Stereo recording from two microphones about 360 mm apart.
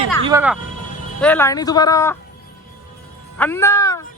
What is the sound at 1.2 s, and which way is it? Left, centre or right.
Speech, centre.